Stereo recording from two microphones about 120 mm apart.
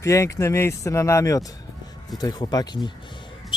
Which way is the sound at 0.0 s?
25° left (ahead or behind).